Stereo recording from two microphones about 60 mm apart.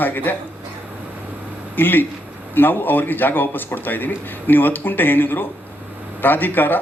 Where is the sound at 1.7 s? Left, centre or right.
Left.